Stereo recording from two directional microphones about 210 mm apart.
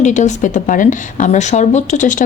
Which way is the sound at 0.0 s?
35° left (ahead or behind).